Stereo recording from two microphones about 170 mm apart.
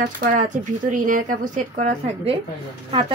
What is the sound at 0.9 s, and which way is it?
Speech, 50° right (ahead or behind).